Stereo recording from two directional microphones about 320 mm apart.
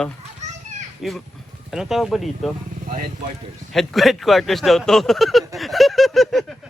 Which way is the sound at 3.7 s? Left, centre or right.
Centre.